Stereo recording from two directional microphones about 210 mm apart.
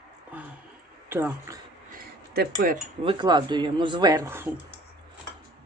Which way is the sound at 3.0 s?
25° right (ahead or behind).